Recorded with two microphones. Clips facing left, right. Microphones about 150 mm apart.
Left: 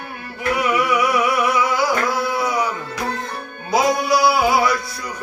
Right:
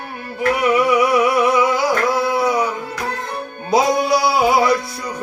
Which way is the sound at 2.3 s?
25° right (ahead or behind).